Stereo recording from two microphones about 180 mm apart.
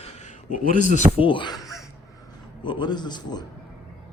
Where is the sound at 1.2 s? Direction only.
25° left (ahead or behind).